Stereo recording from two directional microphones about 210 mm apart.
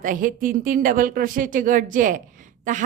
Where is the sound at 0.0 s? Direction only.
40° right (ahead or behind).